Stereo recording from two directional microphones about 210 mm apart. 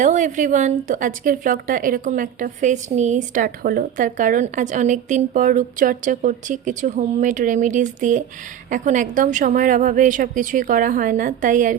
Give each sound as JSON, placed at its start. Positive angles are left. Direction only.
{"t": 0.0, "sound": "a woman's voice", "side_deg": -35}